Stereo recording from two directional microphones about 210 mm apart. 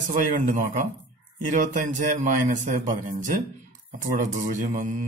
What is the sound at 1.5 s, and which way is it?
A man's voice, 35° right (ahead or behind).